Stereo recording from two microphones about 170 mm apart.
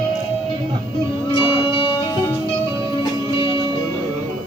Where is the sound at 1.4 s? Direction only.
30° left (ahead or behind).